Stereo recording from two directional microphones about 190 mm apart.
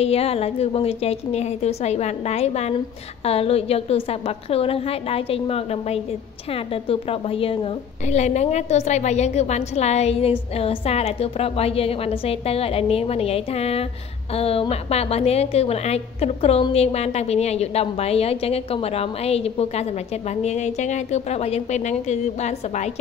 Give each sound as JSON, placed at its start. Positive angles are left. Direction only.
{"t": 0.0, "sound": "a woman's voice", "side_deg": 30}